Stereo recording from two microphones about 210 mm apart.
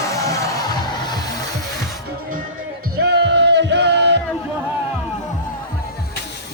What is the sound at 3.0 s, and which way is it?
Music, 55° right (ahead or behind).